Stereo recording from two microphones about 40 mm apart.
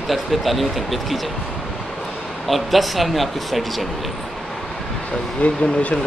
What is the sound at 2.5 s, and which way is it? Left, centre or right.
Speech, centre.